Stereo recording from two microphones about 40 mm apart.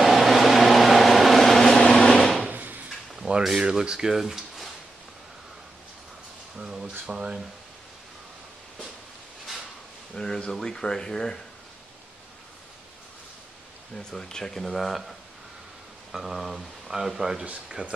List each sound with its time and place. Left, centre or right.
0.0 s vehicle: centre
2.5 s a sound: right
3.2 s a sound: right
3.8 s speech: centre
4.1 s speech: centre
6.6 s a sound: centre
7.1 s speech: centre
10.1 s speech: centre
13.9 s speech: centre
17.8 s speech: right